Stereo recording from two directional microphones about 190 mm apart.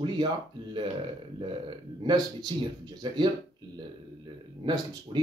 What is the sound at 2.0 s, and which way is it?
Speech, 20° right (ahead or behind).